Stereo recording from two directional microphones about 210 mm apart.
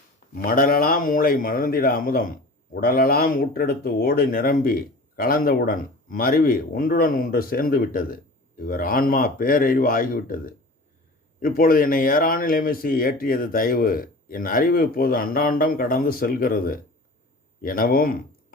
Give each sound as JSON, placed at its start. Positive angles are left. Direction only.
{"t": 0.3, "sound": "speech", "side_deg": 45}